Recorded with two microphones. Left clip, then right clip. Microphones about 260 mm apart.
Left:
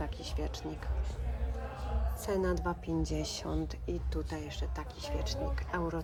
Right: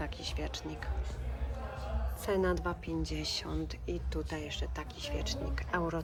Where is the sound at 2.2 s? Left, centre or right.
Centre.